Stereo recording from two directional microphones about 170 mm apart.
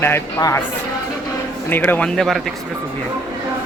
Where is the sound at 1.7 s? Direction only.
10° left (ahead or behind).